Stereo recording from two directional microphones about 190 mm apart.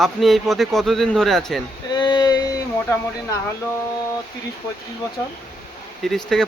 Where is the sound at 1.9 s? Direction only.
25° left (ahead or behind).